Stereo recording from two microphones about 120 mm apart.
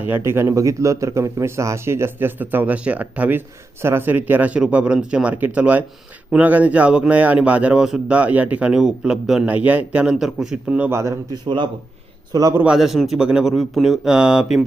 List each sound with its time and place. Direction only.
0.0 s speech: 20° right (ahead or behind)
11.4 s speech: 40° right (ahead or behind)
12.3 s a man's voice: 30° right (ahead or behind)
12.5 s speech: 5° right (ahead or behind)